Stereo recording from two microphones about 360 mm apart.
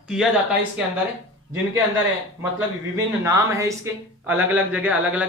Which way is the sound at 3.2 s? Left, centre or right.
Centre.